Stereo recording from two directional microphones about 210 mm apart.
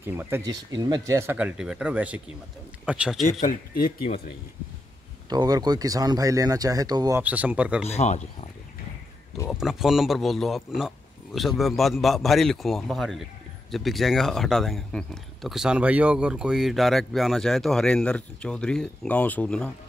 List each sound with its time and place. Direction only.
0.0 s a man's voice: 10° right (ahead or behind)
3.3 s speech: 40° left (ahead or behind)
5.3 s speech: 20° right (ahead or behind)
7.8 s speech: 30° left (ahead or behind)
9.5 s a man's voice: centre (ahead or behind)